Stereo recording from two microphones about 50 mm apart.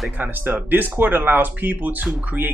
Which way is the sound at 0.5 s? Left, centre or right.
Right.